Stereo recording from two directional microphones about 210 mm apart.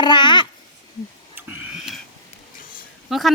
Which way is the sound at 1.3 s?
10° right (ahead or behind).